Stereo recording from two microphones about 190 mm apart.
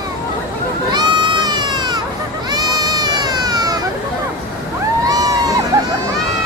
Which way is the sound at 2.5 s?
20° right (ahead or behind).